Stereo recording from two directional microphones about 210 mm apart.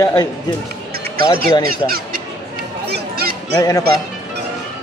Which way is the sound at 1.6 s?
45° right (ahead or behind).